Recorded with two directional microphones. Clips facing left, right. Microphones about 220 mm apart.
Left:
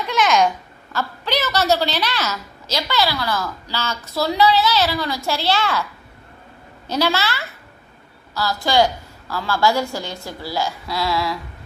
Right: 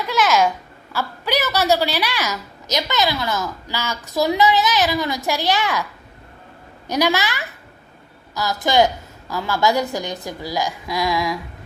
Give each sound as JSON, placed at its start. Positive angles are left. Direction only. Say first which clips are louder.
{"t": 0.1, "sound": "a sound", "louder": "even", "side_deg": -5}
{"t": 0.9, "sound": "a woman's voice", "louder": "right 1 dB", "side_deg": -10}
{"t": 6.8, "sound": "a woman's voice", "louder": "right 1 dB", "side_deg": -15}